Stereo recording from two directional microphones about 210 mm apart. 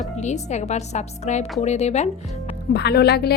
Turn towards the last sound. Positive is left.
turn(degrees=50)  # may be behind; listen again after turning